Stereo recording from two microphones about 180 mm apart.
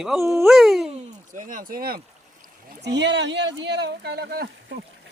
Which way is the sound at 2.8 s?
75° right (ahead or behind).